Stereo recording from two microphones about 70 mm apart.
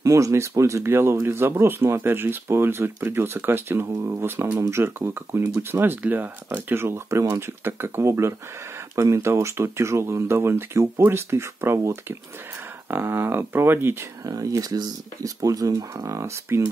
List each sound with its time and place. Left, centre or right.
0.0 s speech: right
14.2 s speech: right